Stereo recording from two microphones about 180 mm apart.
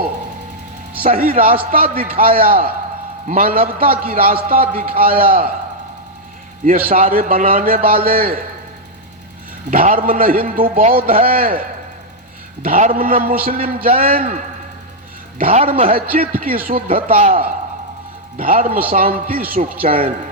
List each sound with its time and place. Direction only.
0.9 s a man's voice: 50° right (ahead or behind)
6.7 s a man's voice: 50° right (ahead or behind)
9.6 s a man's voice: 50° right (ahead or behind)
12.6 s a man's voice: 50° right (ahead or behind)
18.3 s a man's voice: 50° right (ahead or behind)